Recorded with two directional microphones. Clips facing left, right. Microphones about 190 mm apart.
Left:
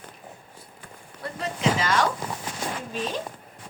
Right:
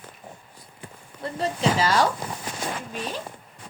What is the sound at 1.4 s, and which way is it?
Speech, 35° right (ahead or behind).